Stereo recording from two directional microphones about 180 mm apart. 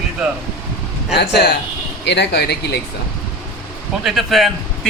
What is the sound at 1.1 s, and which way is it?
A man's voice, 65° left (ahead or behind).